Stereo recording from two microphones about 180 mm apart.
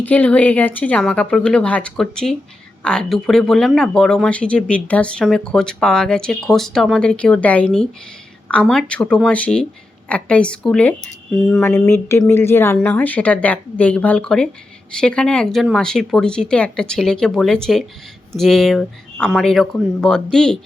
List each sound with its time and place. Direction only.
0.0 s a woman's voice: 10° left (ahead or behind)
11.7 s a woman's voice: 15° left (ahead or behind)